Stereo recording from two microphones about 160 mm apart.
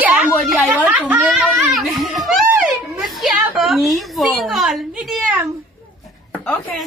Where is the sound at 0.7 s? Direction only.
10° right (ahead or behind).